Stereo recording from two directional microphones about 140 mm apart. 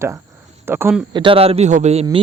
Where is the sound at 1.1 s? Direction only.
40° right (ahead or behind).